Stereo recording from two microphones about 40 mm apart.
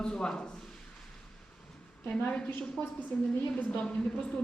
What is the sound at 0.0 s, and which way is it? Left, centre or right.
Speech, centre.